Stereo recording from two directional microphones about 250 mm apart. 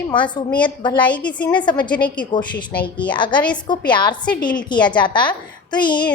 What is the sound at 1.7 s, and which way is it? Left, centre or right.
Speech, centre.